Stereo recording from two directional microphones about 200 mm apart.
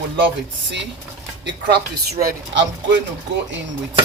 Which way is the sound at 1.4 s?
55° right (ahead or behind).